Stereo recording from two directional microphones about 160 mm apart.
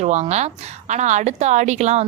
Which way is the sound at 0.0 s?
45° right (ahead or behind).